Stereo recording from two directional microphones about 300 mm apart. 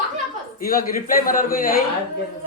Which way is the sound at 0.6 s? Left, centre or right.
Left.